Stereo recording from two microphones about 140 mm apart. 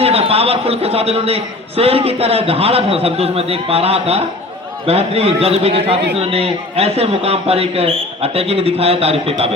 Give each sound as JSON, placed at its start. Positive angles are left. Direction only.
{"t": 0.0, "sound": "a man's voice", "side_deg": -45}